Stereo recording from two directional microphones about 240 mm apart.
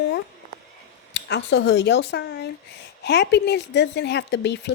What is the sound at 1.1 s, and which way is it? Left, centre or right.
Speech, left.